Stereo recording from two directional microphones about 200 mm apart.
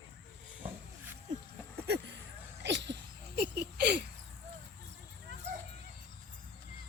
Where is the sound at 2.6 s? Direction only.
60° right (ahead or behind).